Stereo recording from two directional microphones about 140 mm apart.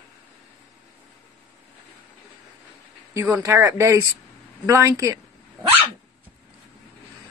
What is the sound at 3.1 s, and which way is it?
Speech, 20° right (ahead or behind).